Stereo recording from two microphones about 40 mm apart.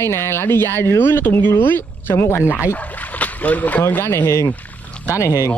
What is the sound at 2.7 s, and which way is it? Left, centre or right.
Boat, left.